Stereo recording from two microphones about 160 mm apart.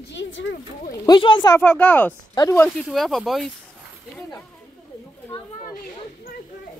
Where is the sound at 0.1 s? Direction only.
90° left.